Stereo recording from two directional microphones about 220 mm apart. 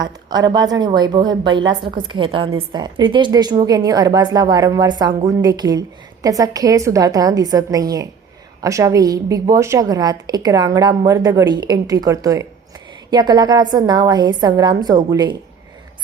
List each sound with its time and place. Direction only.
0.0 s a woman's voice: 20° right (ahead or behind)